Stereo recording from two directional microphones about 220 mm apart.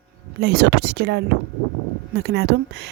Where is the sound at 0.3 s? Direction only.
45° right (ahead or behind).